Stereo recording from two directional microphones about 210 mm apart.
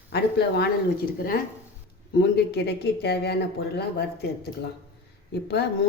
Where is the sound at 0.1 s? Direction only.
50° left (ahead or behind).